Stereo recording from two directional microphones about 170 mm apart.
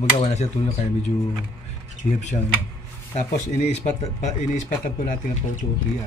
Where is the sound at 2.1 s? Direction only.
45° left (ahead or behind).